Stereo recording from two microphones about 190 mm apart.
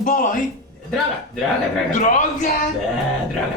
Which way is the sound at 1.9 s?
40° left (ahead or behind).